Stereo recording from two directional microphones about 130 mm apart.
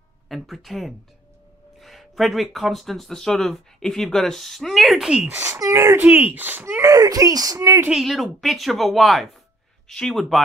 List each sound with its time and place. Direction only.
0.3 s speech: centre (ahead or behind)
5.4 s speech: 20° right (ahead or behind)
7.9 s speech: centre (ahead or behind)